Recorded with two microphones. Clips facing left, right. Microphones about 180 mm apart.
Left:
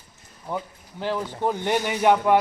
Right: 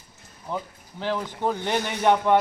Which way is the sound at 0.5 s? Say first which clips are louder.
Left 1 dB; 15° left (ahead or behind).